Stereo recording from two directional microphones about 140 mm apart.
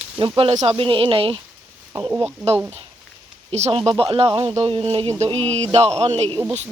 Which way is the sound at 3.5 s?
50° right (ahead or behind).